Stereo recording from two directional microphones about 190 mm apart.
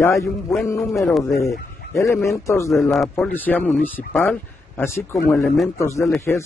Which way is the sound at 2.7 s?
Centre (ahead or behind).